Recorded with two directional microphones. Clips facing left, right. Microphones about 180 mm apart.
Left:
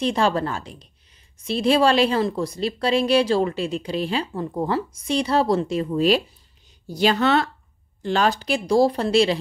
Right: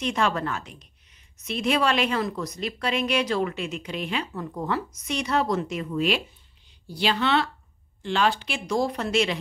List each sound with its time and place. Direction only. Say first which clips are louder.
0.0 s a woman's voice: left 4 dB; 30° left (ahead or behind)